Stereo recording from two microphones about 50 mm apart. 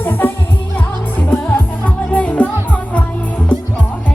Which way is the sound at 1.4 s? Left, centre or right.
Left.